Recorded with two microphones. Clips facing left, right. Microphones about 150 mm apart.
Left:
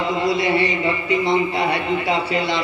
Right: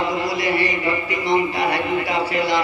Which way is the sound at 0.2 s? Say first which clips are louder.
Left 2 dB; 25° left (ahead or behind).